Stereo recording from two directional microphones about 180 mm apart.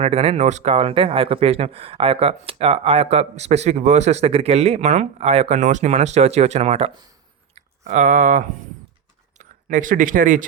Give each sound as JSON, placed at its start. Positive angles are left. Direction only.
{"t": 0.0, "sound": "speech", "side_deg": -35}